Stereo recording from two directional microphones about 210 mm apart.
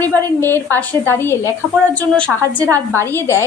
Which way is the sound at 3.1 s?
10° left (ahead or behind).